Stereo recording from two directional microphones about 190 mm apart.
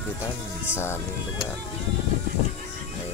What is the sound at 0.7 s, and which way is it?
Speech, 15° left (ahead or behind).